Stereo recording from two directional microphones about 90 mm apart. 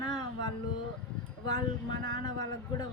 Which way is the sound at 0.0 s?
50° left (ahead or behind).